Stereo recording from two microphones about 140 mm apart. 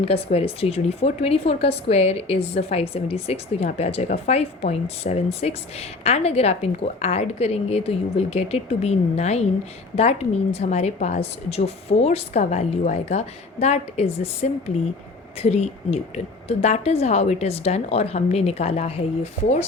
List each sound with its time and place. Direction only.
0.0 s a woman's voice: 45° left (ahead or behind)